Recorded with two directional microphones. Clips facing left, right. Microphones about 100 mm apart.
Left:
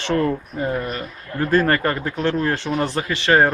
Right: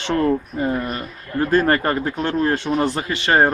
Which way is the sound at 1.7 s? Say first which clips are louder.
Right 1 dB; 25° right (ahead or behind).